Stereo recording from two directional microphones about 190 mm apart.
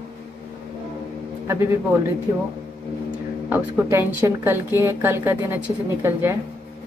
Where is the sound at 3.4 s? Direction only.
10° right (ahead or behind).